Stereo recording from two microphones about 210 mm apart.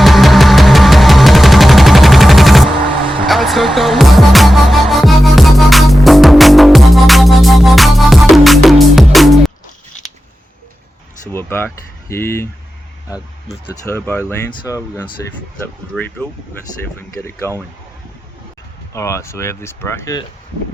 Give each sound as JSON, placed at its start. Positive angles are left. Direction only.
{"t": 0.0, "sound": "music", "side_deg": 0}
{"t": 11.3, "sound": "speech", "side_deg": 10}
{"t": 13.8, "sound": "speech", "side_deg": 10}
{"t": 15.6, "sound": "speech", "side_deg": 10}
{"t": 17.2, "sound": "speech", "side_deg": 10}
{"t": 18.9, "sound": "speech", "side_deg": 15}